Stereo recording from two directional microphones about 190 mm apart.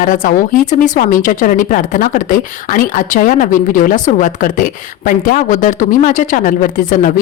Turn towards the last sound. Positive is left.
turn(degrees=45)  # may be behind; listen again after turning